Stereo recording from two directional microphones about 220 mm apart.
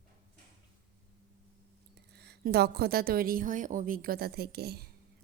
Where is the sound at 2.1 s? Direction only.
50° right (ahead or behind).